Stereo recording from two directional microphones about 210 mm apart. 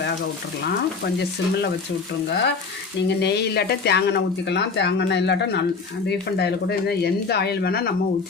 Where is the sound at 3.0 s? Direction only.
55° left (ahead or behind).